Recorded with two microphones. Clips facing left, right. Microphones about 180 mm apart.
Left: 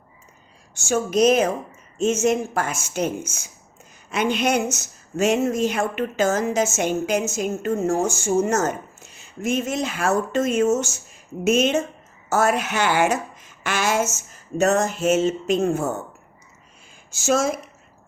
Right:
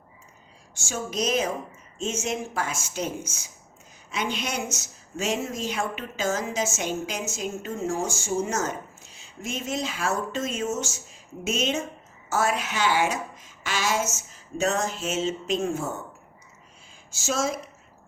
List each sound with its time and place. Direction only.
0.9 s a woman's voice: 55° left (ahead or behind)
17.2 s a woman's voice: 50° left (ahead or behind)